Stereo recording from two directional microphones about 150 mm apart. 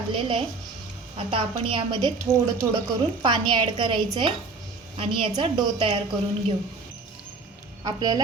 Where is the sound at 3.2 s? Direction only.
30° right (ahead or behind).